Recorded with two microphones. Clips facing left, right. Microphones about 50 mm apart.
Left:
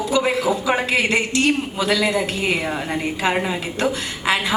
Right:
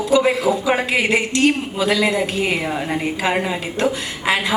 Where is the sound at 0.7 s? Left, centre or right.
Centre.